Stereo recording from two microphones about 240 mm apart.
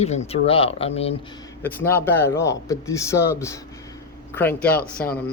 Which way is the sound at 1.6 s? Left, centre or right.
Centre.